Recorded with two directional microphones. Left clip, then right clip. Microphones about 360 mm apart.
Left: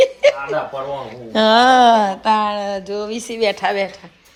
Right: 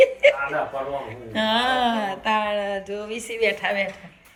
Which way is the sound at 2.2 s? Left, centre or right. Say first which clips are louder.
Left 6 dB; centre.